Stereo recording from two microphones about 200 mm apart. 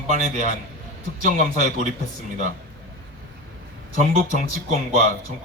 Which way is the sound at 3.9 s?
35° left (ahead or behind).